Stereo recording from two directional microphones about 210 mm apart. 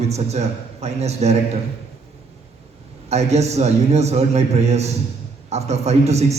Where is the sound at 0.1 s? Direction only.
30° right (ahead or behind).